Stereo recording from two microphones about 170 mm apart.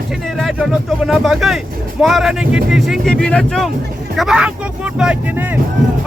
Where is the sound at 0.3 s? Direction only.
Centre (ahead or behind).